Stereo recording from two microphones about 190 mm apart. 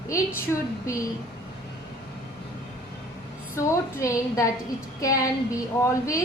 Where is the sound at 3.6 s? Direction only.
15° left (ahead or behind).